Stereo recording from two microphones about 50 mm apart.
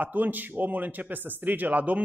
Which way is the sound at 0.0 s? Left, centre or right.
Right.